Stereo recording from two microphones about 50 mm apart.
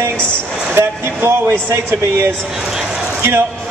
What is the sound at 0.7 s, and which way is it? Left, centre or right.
A man's voice, right.